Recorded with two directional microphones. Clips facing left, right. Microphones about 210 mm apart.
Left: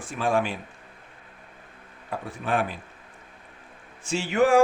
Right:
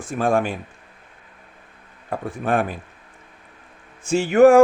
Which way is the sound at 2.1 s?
50° right (ahead or behind).